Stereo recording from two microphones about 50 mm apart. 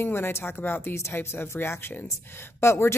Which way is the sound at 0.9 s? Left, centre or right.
Left.